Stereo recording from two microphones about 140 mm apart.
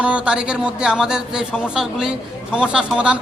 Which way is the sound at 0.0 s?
10° right (ahead or behind).